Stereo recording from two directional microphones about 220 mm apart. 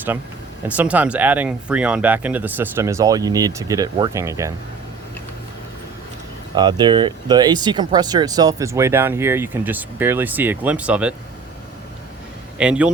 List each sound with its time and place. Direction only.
0.8 s speech: 5° right (ahead or behind)
6.5 s speech: 20° right (ahead or behind)
12.5 s speech: 5° right (ahead or behind)